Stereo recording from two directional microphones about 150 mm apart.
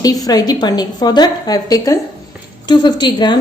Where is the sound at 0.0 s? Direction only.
25° left (ahead or behind).